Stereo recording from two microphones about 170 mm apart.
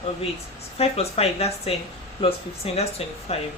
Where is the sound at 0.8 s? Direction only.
35° left (ahead or behind).